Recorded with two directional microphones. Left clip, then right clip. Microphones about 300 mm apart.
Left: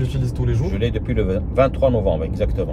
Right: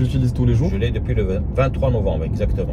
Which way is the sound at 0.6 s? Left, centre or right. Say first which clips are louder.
Left 1 dB; centre.